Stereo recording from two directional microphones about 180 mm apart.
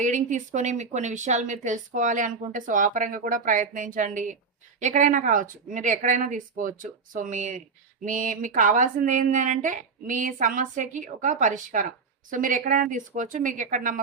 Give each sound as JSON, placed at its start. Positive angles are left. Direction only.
{"t": 0.0, "sound": "speech", "side_deg": -45}